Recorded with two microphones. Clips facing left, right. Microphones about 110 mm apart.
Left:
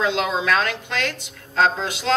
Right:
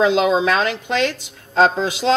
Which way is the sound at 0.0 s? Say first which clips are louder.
Right 7 dB; 20° right (ahead or behind).